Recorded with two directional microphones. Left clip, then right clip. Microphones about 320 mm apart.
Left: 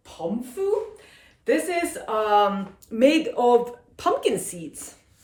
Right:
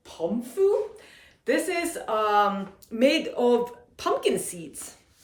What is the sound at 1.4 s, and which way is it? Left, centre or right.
Speech, centre.